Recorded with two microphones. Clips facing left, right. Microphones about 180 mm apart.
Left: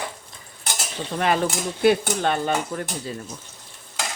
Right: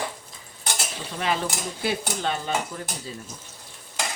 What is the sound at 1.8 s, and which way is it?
Stir, 55° left (ahead or behind).